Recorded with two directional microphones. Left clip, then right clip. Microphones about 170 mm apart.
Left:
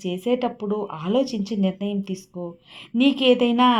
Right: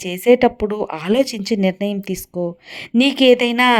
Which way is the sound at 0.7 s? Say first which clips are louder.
Right 5 dB; 45° right (ahead or behind).